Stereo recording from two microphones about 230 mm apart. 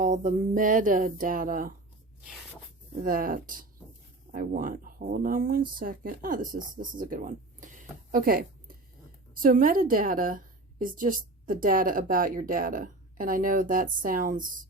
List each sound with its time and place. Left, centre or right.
0.0 s a woman's voice: right
3.0 s a woman's voice: right